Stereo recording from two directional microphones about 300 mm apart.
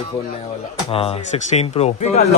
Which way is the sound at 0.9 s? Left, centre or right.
Centre.